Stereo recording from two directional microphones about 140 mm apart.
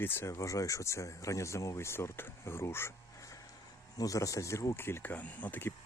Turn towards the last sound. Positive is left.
turn(degrees=10)  # may be behind; listen again after turning